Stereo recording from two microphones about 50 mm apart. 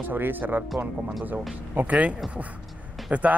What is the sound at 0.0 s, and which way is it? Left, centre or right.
Speech, right.